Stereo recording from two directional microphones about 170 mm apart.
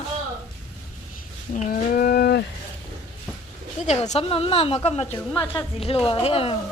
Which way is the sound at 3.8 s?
40° left (ahead or behind).